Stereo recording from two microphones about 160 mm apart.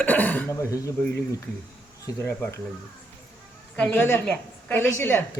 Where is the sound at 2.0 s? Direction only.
15° left (ahead or behind).